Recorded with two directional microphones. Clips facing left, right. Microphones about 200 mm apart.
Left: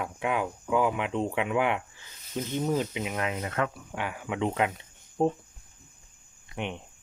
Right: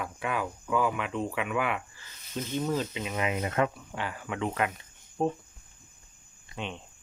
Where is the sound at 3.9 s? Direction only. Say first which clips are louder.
Left 2 dB; 15° left (ahead or behind).